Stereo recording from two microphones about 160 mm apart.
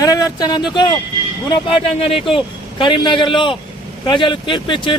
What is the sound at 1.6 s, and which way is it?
Speech, 35° left (ahead or behind).